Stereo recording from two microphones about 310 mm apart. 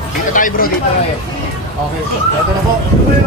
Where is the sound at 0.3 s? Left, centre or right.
Left.